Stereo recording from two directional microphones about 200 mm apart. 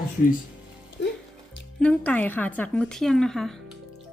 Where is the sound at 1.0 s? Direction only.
65° left (ahead or behind).